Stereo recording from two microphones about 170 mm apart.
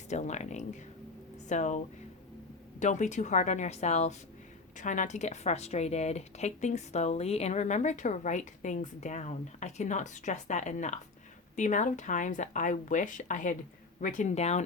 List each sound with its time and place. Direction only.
0.1 s speech: 45° left (ahead or behind)
2.8 s speech: 45° left (ahead or behind)